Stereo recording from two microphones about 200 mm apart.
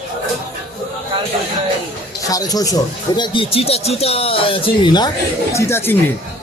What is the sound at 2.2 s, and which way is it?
Speech, 20° left (ahead or behind).